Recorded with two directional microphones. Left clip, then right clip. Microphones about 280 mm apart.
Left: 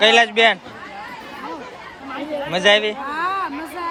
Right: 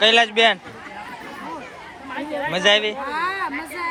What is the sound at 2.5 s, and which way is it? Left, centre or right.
Speech, centre.